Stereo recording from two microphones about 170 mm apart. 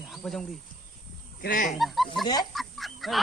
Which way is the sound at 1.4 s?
55° left (ahead or behind).